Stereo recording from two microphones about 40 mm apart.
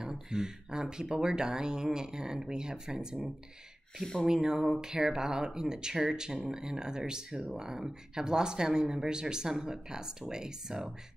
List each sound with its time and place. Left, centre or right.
0.0 s speech: centre
4.0 s speech: centre
4.3 s speech: centre